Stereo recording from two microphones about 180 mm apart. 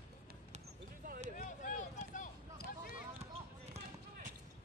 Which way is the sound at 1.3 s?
45° left (ahead or behind).